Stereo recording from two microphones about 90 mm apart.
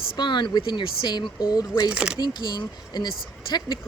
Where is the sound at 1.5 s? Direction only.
45° left (ahead or behind).